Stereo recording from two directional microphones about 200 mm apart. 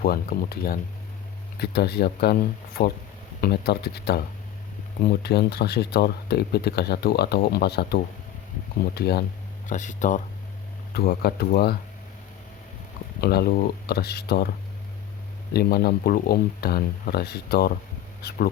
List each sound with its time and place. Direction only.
0.0 s speech: 50° left (ahead or behind)
9.6 s speech: 40° left (ahead or behind)
10.9 s speech: 50° left (ahead or behind)
13.2 s speech: 50° left (ahead or behind)
15.5 s speech: 50° left (ahead or behind)